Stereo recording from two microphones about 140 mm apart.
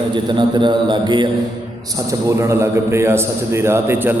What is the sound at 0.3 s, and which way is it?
Mantra, 35° right (ahead or behind).